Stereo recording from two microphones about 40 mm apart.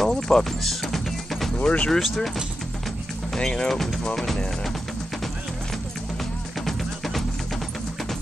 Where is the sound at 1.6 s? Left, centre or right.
Left.